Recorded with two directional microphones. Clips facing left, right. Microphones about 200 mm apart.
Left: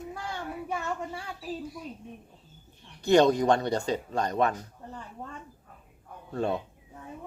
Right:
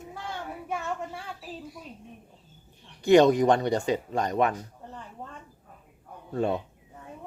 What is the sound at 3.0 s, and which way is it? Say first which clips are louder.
Speech: right 3 dB; 20° right (ahead or behind).